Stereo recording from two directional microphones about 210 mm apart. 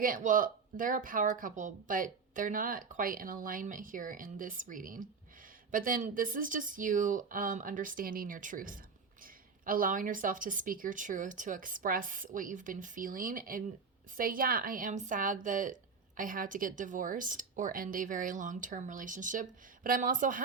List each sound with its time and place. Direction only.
0.0 s a woman's voice: 40° right (ahead or behind)